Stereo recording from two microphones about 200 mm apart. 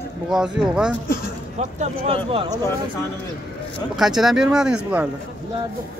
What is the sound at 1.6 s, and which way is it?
Speech, 35° right (ahead or behind).